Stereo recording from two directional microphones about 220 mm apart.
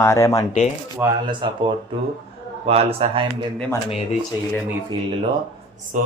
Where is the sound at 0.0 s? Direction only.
10° left (ahead or behind).